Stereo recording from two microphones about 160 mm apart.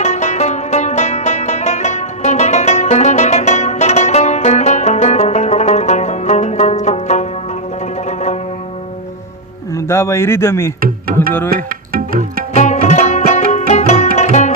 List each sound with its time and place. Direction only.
0.0 s music: 45° left (ahead or behind)
9.7 s a sound: 15° left (ahead or behind)
10.8 s music: 65° right (ahead or behind)
12.5 s music: 45° left (ahead or behind)